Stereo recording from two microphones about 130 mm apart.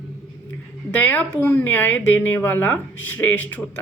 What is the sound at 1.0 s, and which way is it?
A woman's voice, 15° left (ahead or behind).